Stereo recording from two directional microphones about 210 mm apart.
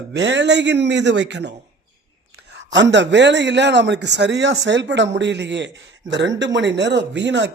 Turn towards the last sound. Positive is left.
turn(degrees=-55)  # may be behind; listen again after turning